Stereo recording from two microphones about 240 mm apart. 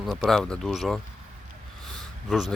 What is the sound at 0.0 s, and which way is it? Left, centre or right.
Speech, centre.